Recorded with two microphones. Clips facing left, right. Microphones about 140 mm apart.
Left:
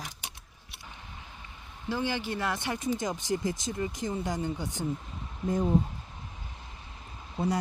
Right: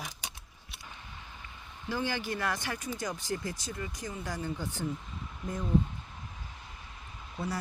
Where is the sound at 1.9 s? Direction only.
20° left (ahead or behind).